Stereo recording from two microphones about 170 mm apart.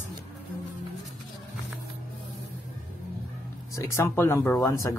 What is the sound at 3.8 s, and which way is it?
Speech, 15° left (ahead or behind).